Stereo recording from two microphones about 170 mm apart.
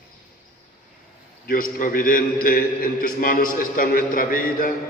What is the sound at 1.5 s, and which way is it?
A man's voice, 55° left (ahead or behind).